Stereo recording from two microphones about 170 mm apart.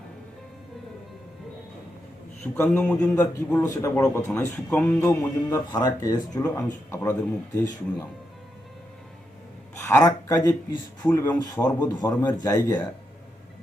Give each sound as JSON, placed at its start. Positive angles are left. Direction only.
{"t": 2.6, "sound": "a man's voice", "side_deg": 5}
{"t": 3.2, "sound": "speech", "side_deg": 20}
{"t": 4.3, "sound": "a man's voice", "side_deg": 5}
{"t": 4.9, "sound": "a man's voice", "side_deg": 20}
{"t": 9.7, "sound": "speech", "side_deg": 15}